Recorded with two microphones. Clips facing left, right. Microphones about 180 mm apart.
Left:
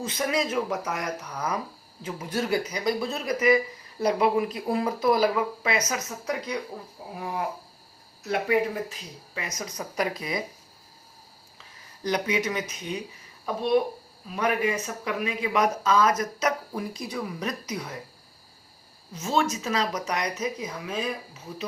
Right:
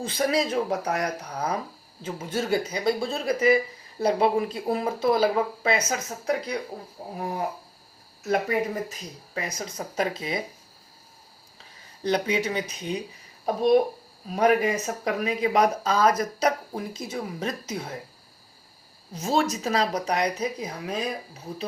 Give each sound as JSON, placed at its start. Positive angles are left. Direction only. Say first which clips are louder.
{"t": 0.0, "sound": "speech", "louder": "right 3 dB", "side_deg": -30}
{"t": 8.3, "sound": "speech", "louder": "even", "side_deg": -40}
{"t": 12.0, "sound": "speech", "louder": "right 2 dB", "side_deg": -30}
{"t": 19.1, "sound": "speech", "louder": "right 1 dB", "side_deg": -35}